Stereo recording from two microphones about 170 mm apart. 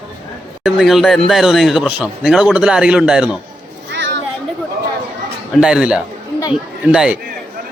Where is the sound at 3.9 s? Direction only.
90° right.